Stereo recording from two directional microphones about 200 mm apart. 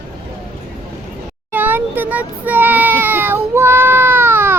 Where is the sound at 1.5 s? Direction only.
10° right (ahead or behind).